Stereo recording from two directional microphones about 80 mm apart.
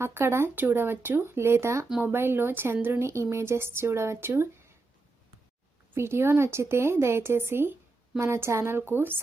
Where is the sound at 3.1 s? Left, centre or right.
Right.